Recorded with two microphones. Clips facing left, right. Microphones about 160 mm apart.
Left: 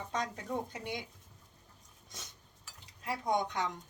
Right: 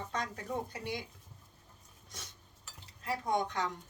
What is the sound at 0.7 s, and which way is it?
Speech, 20° left (ahead or behind).